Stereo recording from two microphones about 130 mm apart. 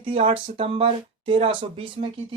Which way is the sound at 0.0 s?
50° right (ahead or behind).